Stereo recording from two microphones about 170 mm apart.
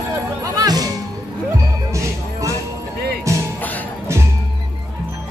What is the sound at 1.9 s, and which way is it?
Music, 20° right (ahead or behind).